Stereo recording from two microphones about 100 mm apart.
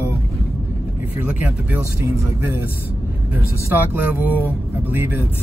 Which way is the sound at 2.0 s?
25° right (ahead or behind).